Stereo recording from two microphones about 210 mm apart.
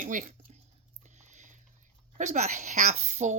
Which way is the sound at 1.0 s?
35° right (ahead or behind).